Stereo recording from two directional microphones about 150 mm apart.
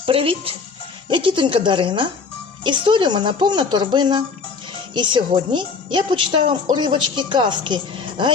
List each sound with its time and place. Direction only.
0.0 s a woman's voice: 35° right (ahead or behind)